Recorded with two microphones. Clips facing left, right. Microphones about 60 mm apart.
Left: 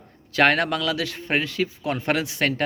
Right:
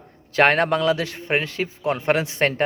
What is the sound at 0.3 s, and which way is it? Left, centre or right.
A man's voice, right.